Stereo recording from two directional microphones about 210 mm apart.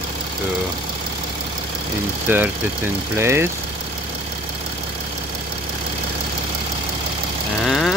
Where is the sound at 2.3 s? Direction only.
10° right (ahead or behind).